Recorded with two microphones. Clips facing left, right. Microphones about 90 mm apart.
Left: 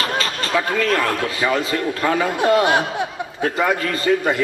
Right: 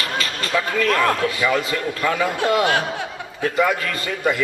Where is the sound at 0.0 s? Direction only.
35° left (ahead or behind).